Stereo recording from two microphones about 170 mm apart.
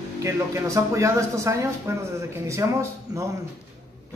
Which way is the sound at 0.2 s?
15° right (ahead or behind).